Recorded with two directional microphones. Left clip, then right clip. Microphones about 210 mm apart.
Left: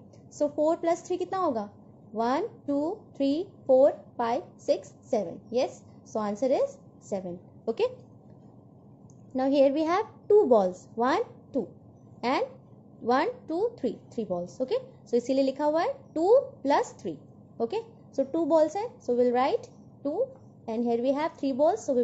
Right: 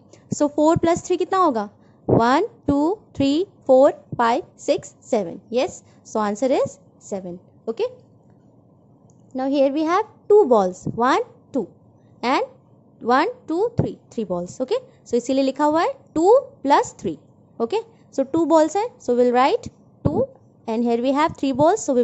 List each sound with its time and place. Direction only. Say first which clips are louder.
0.4 s a woman's voice: right 8 dB; 40° right (ahead or behind)
7.1 s a woman's voice: right 4 dB; 20° right (ahead or behind)
9.3 s a woman's voice: right 3 dB; 20° right (ahead or behind); by 22.0 s 35° right (ahead or behind)